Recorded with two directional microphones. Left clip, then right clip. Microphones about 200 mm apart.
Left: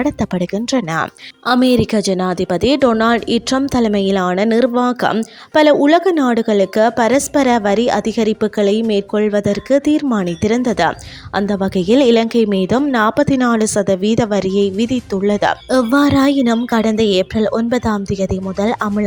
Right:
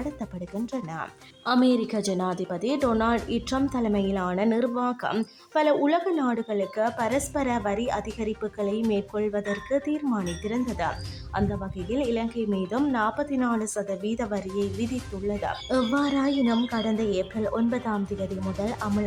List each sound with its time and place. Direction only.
0.0 s a woman's voice: 45° left (ahead or behind)